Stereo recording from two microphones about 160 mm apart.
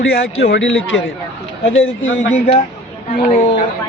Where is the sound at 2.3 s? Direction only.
45° left (ahead or behind).